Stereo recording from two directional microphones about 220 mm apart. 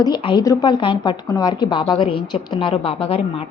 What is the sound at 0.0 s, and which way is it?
Speech, 20° left (ahead or behind).